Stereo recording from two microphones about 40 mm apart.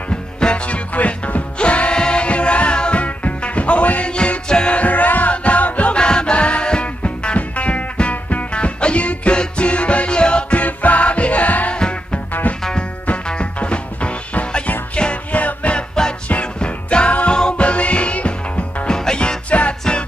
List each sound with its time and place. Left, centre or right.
0.4 s music: left
0.9 s music: left
4.1 s music: left
4.7 s music: left
5.9 s music: left
10.5 s music: left
11.7 s music: left
13.3 s music: left
15.3 s music: left
16.5 s music: left
18.9 s music: centre